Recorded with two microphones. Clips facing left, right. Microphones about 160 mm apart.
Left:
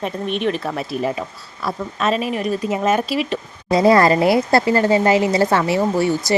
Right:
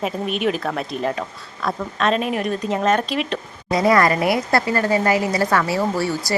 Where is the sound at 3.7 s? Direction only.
30° left (ahead or behind).